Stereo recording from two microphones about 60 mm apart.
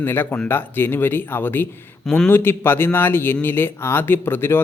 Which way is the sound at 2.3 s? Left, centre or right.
Left.